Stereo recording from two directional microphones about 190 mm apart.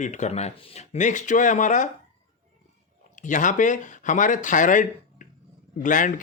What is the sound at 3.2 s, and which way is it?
Speech, 40° left (ahead or behind).